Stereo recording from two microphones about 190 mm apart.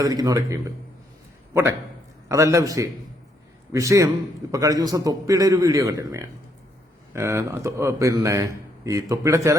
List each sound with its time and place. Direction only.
0.0 s a man's voice: 20° right (ahead or behind)
2.3 s a man's voice: 15° right (ahead or behind)